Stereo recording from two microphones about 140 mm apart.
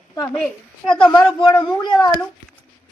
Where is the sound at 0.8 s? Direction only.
5° left (ahead or behind).